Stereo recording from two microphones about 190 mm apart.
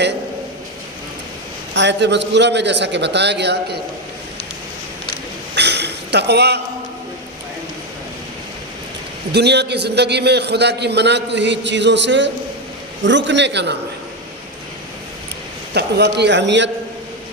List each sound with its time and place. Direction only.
1.7 s a man's voice: 65° right (ahead or behind)
5.5 s a sound: 60° right (ahead or behind)
9.3 s a man's voice: 60° right (ahead or behind)
15.7 s a man's voice: 60° right (ahead or behind)